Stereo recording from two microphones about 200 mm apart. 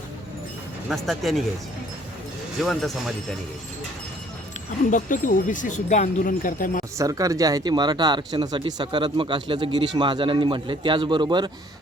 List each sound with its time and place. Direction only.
0.9 s speech: centre (ahead or behind)
2.6 s speech: centre (ahead or behind)
4.9 s speech: 40° left (ahead or behind)
6.9 s speech: 15° right (ahead or behind)